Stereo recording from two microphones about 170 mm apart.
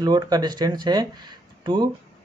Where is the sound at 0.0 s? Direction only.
25° right (ahead or behind).